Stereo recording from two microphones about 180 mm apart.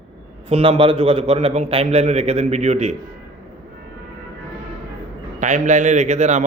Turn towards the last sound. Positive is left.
turn(degrees=-40)  # may be behind; listen again after turning